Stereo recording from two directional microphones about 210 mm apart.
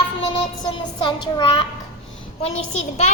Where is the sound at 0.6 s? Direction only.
20° left (ahead or behind).